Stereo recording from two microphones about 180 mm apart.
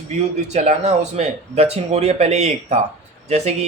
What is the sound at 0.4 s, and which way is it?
Speech, 40° right (ahead or behind).